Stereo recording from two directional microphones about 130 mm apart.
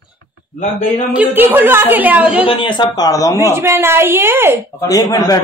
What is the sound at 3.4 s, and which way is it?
Speech, 20° right (ahead or behind).